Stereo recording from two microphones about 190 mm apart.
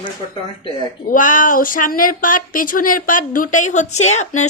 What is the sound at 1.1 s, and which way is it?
A woman's voice, 45° left (ahead or behind).